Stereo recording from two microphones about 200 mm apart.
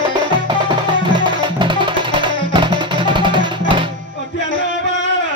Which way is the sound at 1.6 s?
25° right (ahead or behind).